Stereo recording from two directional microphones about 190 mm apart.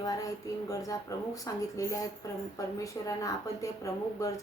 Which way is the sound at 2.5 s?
15° left (ahead or behind).